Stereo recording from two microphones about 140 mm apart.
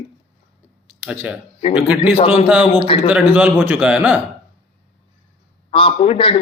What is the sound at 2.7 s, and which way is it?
Speech, 35° left (ahead or behind).